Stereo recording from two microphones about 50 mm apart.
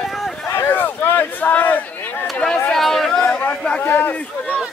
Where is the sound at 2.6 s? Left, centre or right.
Centre.